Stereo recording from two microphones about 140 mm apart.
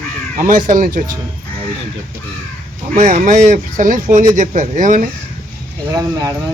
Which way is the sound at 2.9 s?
60° right (ahead or behind).